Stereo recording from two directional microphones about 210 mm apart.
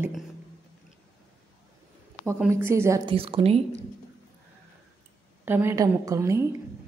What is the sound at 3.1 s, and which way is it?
Speech, 25° right (ahead or behind).